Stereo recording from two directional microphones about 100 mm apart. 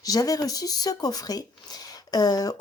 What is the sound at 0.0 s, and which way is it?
Speech, 35° left (ahead or behind).